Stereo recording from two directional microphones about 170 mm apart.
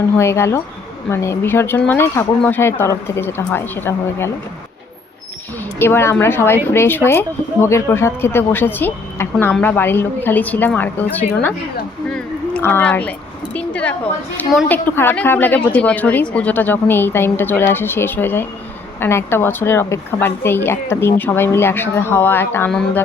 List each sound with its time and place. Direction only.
0.2 s speech: 15° left (ahead or behind)
5.8 s speech: 15° left (ahead or behind)